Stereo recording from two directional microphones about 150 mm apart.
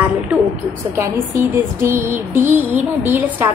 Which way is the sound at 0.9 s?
15° right (ahead or behind).